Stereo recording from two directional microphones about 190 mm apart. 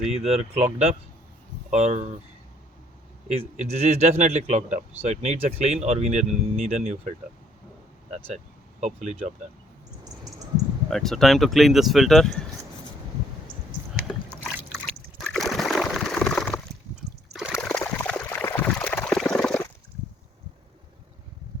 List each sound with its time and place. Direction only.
0.3 s speech: 35° right (ahead or behind)
3.2 s speech: 35° right (ahead or behind)
8.8 s speech: 35° right (ahead or behind)
10.8 s speech: centre (ahead or behind)
14.5 s water: centre (ahead or behind)
17.0 s a sound: centre (ahead or behind)